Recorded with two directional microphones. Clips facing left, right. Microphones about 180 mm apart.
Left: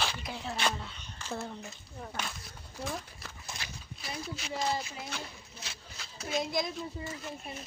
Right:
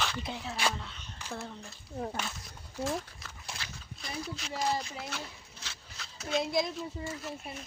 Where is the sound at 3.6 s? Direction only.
5° left (ahead or behind).